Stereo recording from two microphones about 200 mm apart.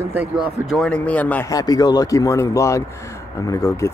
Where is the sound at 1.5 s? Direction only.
20° left (ahead or behind).